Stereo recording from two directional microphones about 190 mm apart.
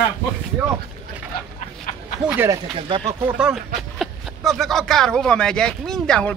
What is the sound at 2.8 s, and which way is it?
Speech, 25° right (ahead or behind).